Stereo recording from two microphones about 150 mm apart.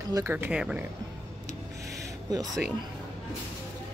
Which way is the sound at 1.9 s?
25° right (ahead or behind).